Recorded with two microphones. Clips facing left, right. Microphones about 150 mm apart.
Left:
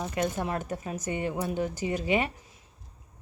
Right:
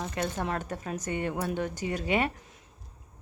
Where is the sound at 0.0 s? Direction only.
15° left (ahead or behind).